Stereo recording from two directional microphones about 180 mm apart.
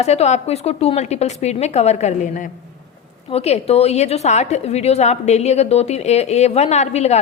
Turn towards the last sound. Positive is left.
turn(degrees=35)  # may be behind; listen again after turning